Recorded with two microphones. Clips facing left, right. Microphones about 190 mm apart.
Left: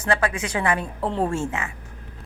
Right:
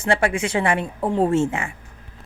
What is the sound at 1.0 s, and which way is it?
Speech, 15° right (ahead or behind).